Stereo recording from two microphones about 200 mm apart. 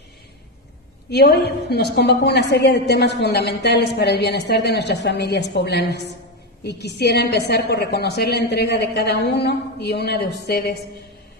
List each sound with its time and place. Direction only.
1.1 s a woman's voice: 55° left (ahead or behind)